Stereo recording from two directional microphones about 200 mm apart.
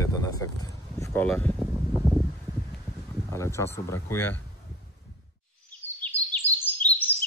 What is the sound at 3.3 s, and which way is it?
Speech, 15° left (ahead or behind).